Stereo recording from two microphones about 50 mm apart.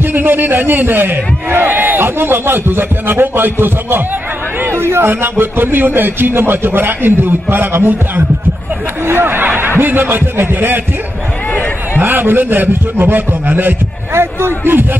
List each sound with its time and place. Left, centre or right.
0.0 s a man's voice: right
9.0 s a man's voice: right
12.0 s a man's voice: right
14.1 s a sound: right